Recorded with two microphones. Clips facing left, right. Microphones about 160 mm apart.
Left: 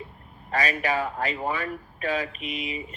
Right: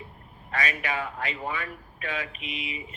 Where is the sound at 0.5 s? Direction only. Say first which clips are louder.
Left 5 dB; 35° left (ahead or behind).